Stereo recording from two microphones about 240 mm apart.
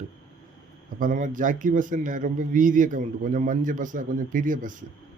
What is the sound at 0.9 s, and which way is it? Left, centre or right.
Speech, right.